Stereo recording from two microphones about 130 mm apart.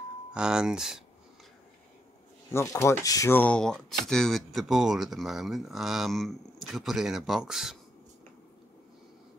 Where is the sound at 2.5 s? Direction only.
20° left (ahead or behind).